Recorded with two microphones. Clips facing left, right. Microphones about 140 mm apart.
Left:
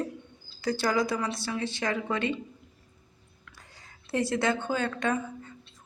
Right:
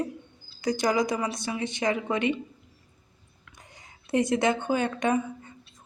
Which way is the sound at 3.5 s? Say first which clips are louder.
Right 2 dB; 20° right (ahead or behind).